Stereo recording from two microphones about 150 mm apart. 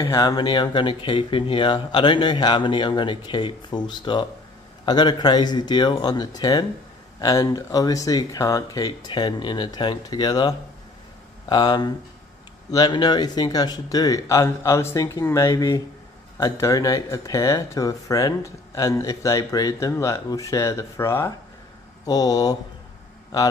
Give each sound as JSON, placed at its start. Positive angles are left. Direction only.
{"t": 0.1, "sound": "speech", "side_deg": 25}